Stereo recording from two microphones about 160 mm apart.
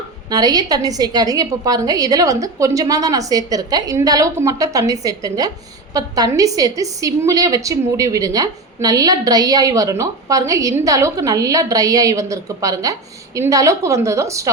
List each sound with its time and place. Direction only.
0.3 s a woman's voice: 25° right (ahead or behind)